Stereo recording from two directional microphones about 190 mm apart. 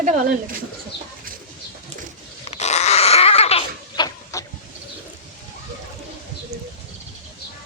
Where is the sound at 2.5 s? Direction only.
35° left (ahead or behind).